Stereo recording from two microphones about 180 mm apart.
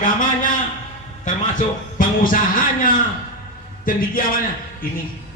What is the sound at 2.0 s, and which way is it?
Speech, 50° left (ahead or behind).